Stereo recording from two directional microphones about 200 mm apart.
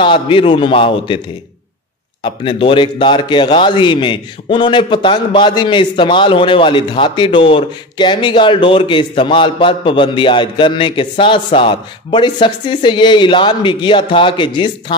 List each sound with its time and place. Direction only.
0.0 s speech: 25° left (ahead or behind)
2.2 s speech: 25° left (ahead or behind)